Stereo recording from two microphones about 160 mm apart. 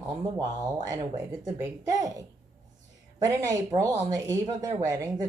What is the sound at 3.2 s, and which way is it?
Speech, 20° right (ahead or behind).